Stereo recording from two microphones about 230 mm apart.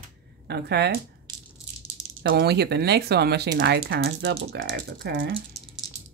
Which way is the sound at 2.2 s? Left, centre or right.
Right.